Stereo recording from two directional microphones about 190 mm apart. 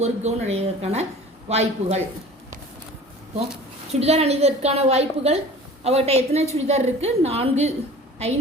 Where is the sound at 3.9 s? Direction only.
35° right (ahead or behind).